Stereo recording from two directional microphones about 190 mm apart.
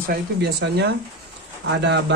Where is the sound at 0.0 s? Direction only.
55° right (ahead or behind).